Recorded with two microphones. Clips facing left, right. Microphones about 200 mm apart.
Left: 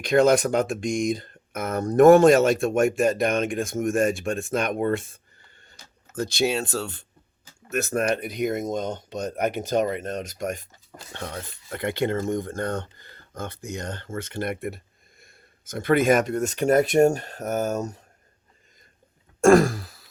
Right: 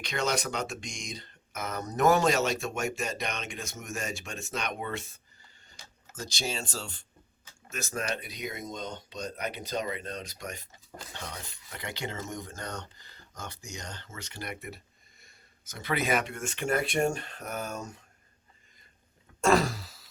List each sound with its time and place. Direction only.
0.0 s speech: 55° left (ahead or behind)
19.4 s throat clearing: 50° left (ahead or behind)